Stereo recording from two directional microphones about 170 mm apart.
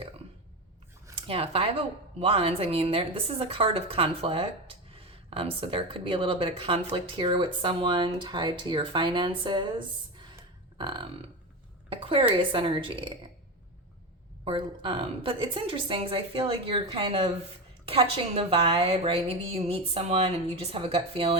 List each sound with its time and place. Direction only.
1.3 s speech: 35° right (ahead or behind)
10.8 s burping: 30° right (ahead or behind)
11.9 s speech: 30° right (ahead or behind)
14.4 s speech: 30° right (ahead or behind)